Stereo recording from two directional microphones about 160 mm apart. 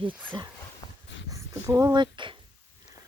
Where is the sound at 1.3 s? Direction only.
20° right (ahead or behind).